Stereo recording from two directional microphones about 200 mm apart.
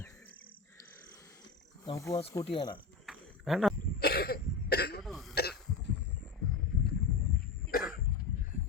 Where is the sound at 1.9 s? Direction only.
15° left (ahead or behind).